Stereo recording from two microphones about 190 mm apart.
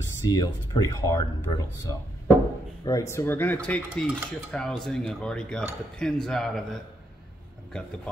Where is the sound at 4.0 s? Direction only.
5° left (ahead or behind).